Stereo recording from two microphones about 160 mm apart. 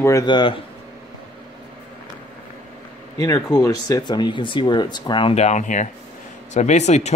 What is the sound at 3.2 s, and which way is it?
Speech, 20° left (ahead or behind).